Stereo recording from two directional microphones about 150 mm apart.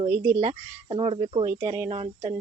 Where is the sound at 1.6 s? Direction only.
25° right (ahead or behind).